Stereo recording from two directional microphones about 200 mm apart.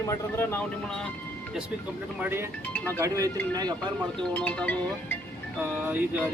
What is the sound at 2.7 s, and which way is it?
Speech, 10° left (ahead or behind).